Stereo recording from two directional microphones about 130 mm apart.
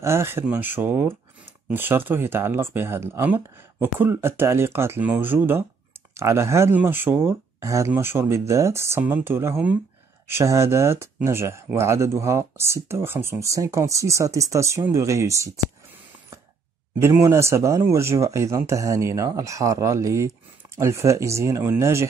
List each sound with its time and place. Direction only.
0.0 s speech: 20° right (ahead or behind)
17.0 s speech: 20° right (ahead or behind)